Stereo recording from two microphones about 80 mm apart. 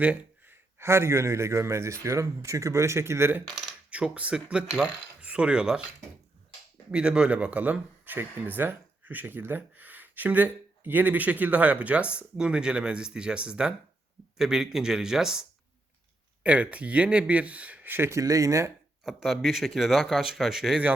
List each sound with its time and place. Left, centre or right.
0.0 s a man's voice: right
3.8 s speech: centre
6.9 s speech: centre; by 18.2 s right
18.2 s speech: right
19.0 s speech: centre